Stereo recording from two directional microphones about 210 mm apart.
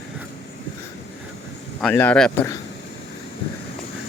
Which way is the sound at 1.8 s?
10° left (ahead or behind).